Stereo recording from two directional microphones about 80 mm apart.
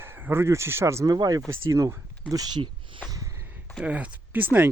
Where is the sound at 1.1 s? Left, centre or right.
Right.